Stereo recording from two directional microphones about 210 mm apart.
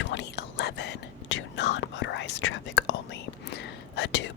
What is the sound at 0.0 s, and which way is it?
Whispering, 55° left (ahead or behind).